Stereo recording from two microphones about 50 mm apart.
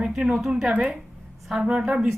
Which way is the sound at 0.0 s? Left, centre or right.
Centre.